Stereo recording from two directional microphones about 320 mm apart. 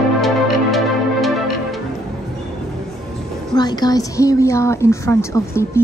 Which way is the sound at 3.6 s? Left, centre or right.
Centre.